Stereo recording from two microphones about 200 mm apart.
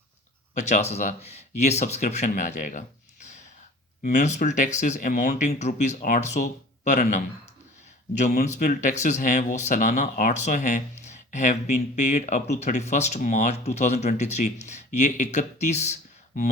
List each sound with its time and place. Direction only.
0.5 s speech: 35° left (ahead or behind)
8.3 s speech: 40° left (ahead or behind)